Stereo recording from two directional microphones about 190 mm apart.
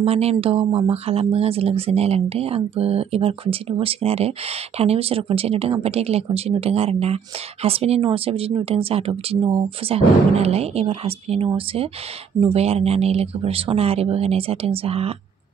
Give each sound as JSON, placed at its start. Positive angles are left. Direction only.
{"t": 0.0, "sound": "speech", "side_deg": -35}